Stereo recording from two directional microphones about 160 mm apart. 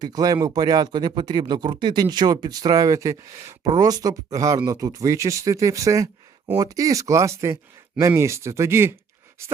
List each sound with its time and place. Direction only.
0.0 s speech: 25° right (ahead or behind)